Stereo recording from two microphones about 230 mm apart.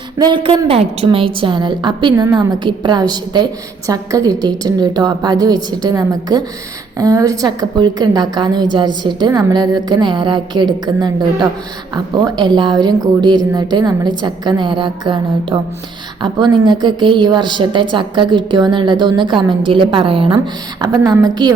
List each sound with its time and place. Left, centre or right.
0.2 s a woman's voice: right